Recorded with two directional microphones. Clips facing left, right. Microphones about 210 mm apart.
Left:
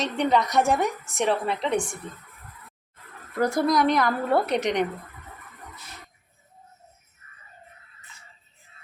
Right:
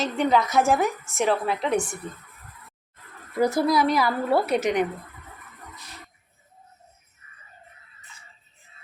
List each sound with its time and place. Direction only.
0.0 s a woman's voice: centre (ahead or behind)
3.4 s a woman's voice: 5° right (ahead or behind)